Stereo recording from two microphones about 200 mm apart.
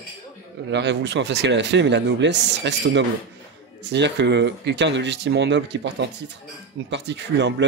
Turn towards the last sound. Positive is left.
turn(degrees=-60)  # may be behind; listen again after turning